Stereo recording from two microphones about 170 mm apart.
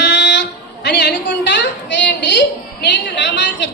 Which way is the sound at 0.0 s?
90° left.